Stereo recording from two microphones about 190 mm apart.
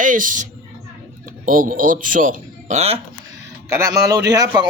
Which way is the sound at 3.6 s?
15° right (ahead or behind).